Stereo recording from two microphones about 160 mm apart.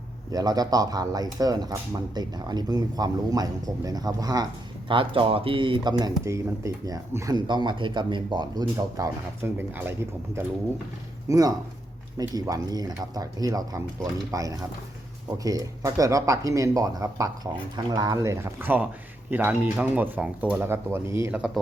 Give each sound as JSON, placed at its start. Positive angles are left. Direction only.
{"t": 0.3, "sound": "speech", "side_deg": -25}
{"t": 4.9, "sound": "speech", "side_deg": -35}